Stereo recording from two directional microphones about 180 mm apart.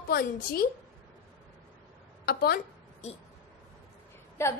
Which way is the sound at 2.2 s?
60° left (ahead or behind).